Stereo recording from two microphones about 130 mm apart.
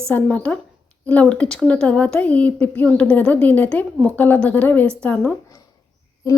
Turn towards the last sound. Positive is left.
turn(degrees=25)  # may be behind; listen again after turning